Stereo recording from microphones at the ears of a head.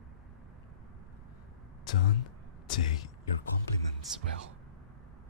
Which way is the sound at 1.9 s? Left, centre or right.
Left.